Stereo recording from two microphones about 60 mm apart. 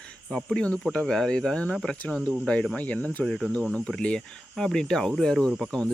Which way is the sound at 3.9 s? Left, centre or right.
Centre.